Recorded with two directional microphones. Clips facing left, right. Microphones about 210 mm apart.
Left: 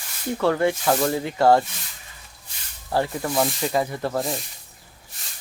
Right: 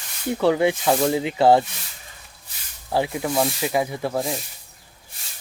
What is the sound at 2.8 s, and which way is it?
Speech, 10° right (ahead or behind).